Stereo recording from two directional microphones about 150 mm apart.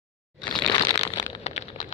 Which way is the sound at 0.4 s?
30° left (ahead or behind).